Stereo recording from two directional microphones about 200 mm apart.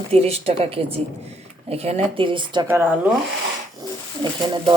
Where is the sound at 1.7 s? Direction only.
30° right (ahead or behind).